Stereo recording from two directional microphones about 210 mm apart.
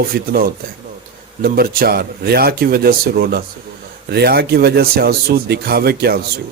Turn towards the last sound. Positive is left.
turn(degrees=-50)  # may be behind; listen again after turning